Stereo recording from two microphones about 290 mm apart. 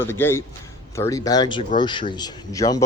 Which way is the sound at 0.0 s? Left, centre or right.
Centre.